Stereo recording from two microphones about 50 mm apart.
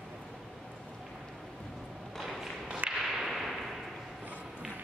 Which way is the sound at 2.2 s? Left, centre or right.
Centre.